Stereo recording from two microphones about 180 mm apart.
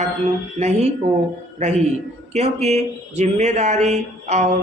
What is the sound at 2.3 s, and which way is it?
A woman's voice, 35° right (ahead or behind).